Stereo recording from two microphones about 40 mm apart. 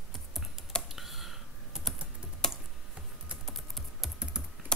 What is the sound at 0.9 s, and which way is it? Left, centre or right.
Computer keyboard, centre.